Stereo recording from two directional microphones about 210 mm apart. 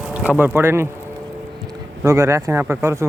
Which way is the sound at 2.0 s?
15° right (ahead or behind).